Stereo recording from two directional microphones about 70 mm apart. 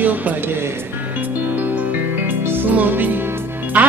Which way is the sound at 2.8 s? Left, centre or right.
Right.